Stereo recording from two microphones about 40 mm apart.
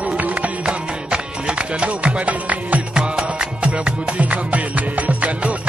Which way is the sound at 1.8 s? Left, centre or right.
Right.